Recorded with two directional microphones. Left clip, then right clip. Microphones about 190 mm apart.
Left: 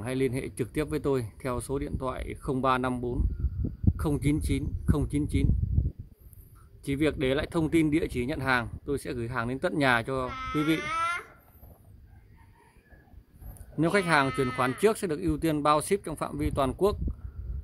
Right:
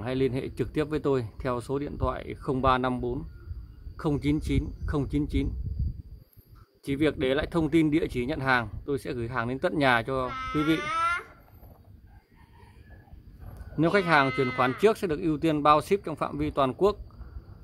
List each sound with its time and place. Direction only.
0.0 s speech: 5° left (ahead or behind)
6.8 s speech: 5° left (ahead or behind)
10.3 s speech: 50° left (ahead or behind)
10.8 s a sound: 50° left (ahead or behind)
13.7 s speech: 10° left (ahead or behind)